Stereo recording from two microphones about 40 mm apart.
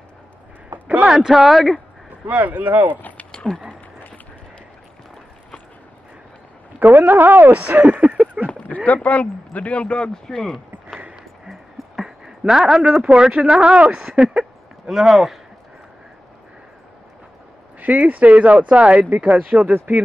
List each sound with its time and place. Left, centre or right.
0.7 s a sound: right
1.0 s speech: centre
2.2 s speech: right
2.9 s a sound: left
6.8 s speech: right
7.5 s speech: right
8.6 s speech: left
10.2 s speech: centre
11.4 s a sound: centre
13.2 s speech: right
14.9 s speech: centre
17.7 s speech: right